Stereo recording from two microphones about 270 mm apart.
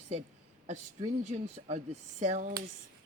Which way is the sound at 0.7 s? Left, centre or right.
Right.